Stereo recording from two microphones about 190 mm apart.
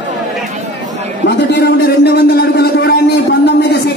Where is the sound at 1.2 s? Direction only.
60° left (ahead or behind).